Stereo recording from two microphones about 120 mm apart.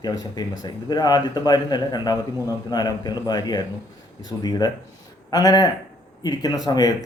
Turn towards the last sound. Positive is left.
turn(degrees=30)  # may be behind; listen again after turning